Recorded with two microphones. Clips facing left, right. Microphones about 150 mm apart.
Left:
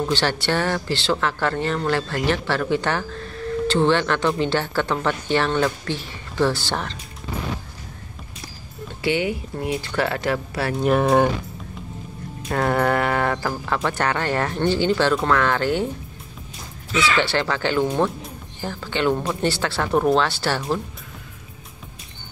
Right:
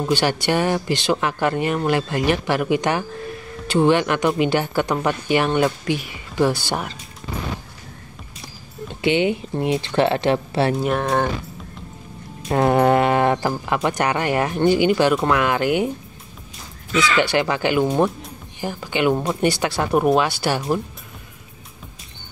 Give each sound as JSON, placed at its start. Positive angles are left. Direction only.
{"t": 0.0, "sound": "speech", "side_deg": -15}
{"t": 8.8, "sound": "speech", "side_deg": -20}
{"t": 10.8, "sound": "speech", "side_deg": 0}
{"t": 12.4, "sound": "speech", "side_deg": -20}
{"t": 17.2, "sound": "speech", "side_deg": -15}